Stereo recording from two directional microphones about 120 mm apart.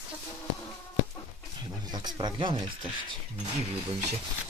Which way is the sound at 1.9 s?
35° right (ahead or behind).